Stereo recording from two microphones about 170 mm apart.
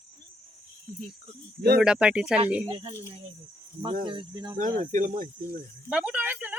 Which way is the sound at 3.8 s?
30° right (ahead or behind).